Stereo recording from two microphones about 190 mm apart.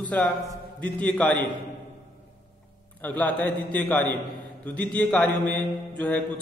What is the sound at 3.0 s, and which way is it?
A man's voice, 10° left (ahead or behind).